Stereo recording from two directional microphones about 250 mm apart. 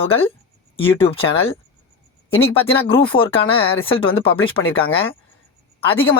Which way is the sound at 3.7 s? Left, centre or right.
Left.